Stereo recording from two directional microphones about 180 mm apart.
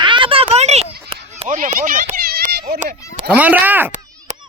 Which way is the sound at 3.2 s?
10° right (ahead or behind).